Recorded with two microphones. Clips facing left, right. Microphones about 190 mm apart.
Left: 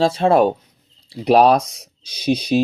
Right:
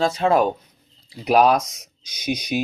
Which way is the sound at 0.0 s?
30° left (ahead or behind).